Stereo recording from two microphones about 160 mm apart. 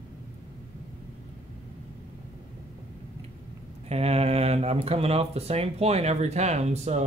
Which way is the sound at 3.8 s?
40° right (ahead or behind).